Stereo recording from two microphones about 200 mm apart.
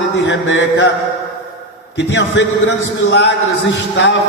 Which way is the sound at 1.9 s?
70° left (ahead or behind).